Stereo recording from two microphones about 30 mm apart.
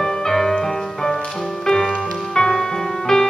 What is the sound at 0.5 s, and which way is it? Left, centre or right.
Music, left.